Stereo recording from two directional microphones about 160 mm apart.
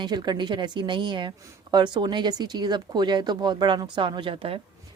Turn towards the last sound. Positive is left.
turn(degrees=-35)  # may be behind; listen again after turning